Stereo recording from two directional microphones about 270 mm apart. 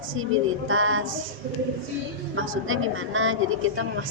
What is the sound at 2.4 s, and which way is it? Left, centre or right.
A woman's voice, right.